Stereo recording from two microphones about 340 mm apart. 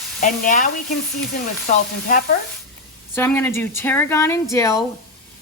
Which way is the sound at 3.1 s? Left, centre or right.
Centre.